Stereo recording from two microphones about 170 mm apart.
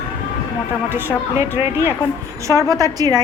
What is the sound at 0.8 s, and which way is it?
A woman's voice, 10° right (ahead or behind).